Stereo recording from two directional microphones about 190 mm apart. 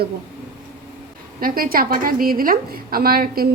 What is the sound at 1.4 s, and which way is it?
A woman's voice, 50° right (ahead or behind).